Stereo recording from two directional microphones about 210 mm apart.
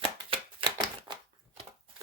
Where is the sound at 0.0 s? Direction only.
25° right (ahead or behind).